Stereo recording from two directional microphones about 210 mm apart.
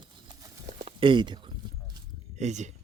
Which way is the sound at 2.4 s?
35° right (ahead or behind).